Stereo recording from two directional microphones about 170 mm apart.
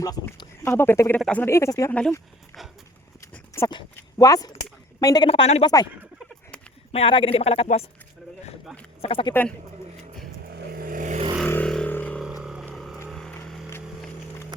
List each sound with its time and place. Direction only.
0.0 s speech: 20° left (ahead or behind)
3.3 s dog: 15° left (ahead or behind)
3.7 s a woman's voice: 25° left (ahead or behind)
5.3 s a woman's voice: 35° left (ahead or behind)
5.6 s speech: 25° left (ahead or behind)
6.9 s a woman's voice: 30° left (ahead or behind)
9.0 s speech: 35° left (ahead or behind)
10.5 s vehicle: 60° right (ahead or behind)
11.4 s vehicle: 10° left (ahead or behind)
12.2 s vehicle: centre (ahead or behind)